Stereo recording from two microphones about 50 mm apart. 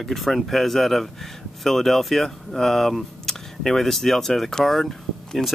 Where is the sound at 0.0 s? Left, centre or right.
Centre.